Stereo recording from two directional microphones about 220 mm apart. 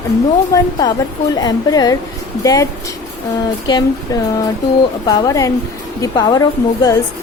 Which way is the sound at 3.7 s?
15° left (ahead or behind).